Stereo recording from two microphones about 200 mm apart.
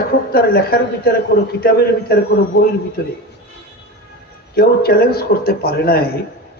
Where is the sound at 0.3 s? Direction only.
50° left (ahead or behind).